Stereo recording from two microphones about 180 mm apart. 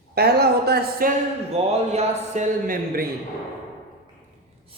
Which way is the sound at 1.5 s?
35° right (ahead or behind).